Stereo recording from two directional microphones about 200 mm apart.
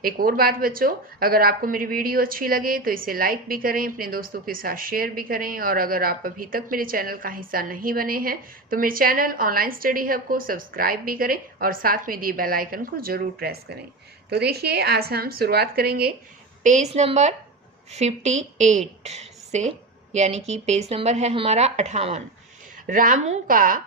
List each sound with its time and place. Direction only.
0.0 s speech: 45° right (ahead or behind)
16.6 s a woman's voice: 35° right (ahead or behind)